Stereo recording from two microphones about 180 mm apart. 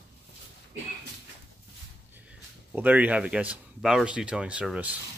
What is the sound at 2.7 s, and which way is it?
Speech, 10° right (ahead or behind).